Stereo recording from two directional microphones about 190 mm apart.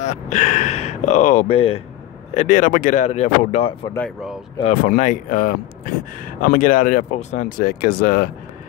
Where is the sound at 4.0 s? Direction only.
5° left (ahead or behind).